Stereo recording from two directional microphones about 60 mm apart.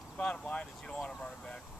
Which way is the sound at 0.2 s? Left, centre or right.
Centre.